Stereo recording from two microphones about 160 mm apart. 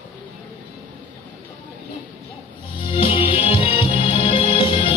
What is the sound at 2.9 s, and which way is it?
Music, 35° left (ahead or behind).